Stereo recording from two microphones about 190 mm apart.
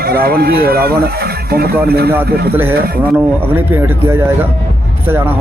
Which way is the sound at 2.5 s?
10° right (ahead or behind).